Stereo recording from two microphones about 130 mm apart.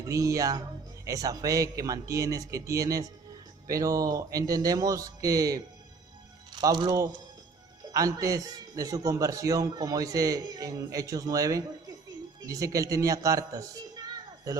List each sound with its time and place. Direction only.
0.0 s a man's voice: 25° right (ahead or behind)
7.9 s a man's voice: 25° right (ahead or behind)